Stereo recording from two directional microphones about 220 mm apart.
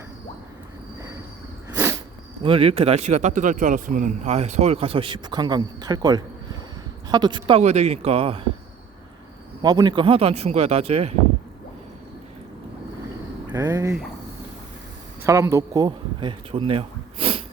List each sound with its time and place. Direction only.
1.7 s a sound: 10° right (ahead or behind)
2.4 s speech: 25° right (ahead or behind)
9.6 s speech: 20° right (ahead or behind)
13.5 s speech: 10° right (ahead or behind)
15.3 s speech: 15° right (ahead or behind)